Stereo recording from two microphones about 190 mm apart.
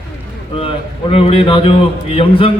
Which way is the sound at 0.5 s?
30° left (ahead or behind).